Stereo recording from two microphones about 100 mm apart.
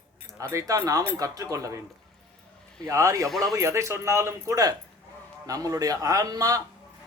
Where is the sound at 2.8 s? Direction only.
30° right (ahead or behind).